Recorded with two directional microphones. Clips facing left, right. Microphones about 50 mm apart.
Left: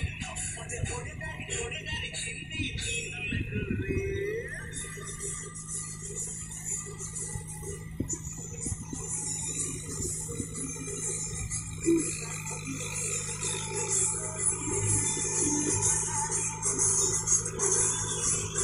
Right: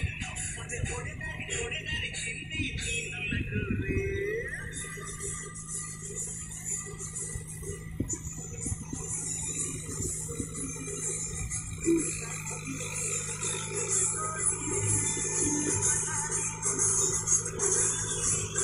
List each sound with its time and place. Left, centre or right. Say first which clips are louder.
0.0 s music: right 1 dB; right
11.8 s a sound: left 1 dB; centre
13.4 s music: left 1 dB; centre